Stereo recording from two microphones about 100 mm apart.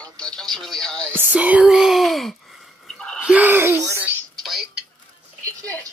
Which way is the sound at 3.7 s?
30° left (ahead or behind).